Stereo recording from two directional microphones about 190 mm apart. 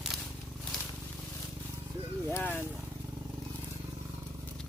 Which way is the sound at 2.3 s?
10° left (ahead or behind).